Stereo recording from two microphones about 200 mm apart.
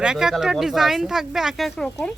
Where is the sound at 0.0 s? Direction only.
5° right (ahead or behind).